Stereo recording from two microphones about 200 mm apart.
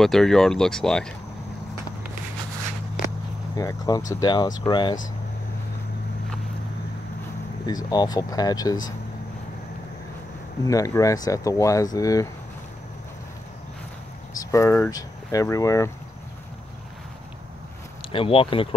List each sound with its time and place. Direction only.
0.0 s speech: centre (ahead or behind)
3.5 s speech: 20° left (ahead or behind)
7.6 s speech: 20° left (ahead or behind)
10.6 s speech: 15° left (ahead or behind)
14.5 s speech: 15° left (ahead or behind)
18.1 s speech: 25° left (ahead or behind)